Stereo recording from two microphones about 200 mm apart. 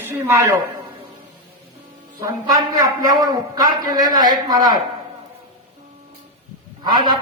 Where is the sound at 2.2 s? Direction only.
20° right (ahead or behind).